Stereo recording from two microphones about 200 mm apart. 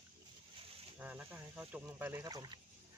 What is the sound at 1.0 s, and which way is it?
Speech, 5° right (ahead or behind).